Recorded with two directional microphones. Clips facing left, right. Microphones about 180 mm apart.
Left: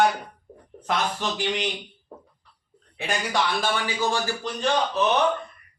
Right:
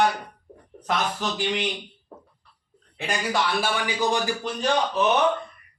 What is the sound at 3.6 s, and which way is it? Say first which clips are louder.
Speech: right 1 dB; 15° right (ahead or behind).